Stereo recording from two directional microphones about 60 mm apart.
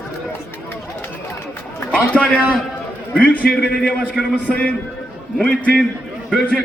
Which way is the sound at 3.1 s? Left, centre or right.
Left.